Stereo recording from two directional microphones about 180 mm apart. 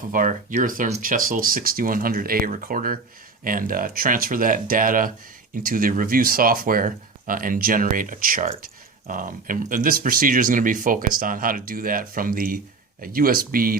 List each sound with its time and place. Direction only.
0.1 s speech: 45° right (ahead or behind)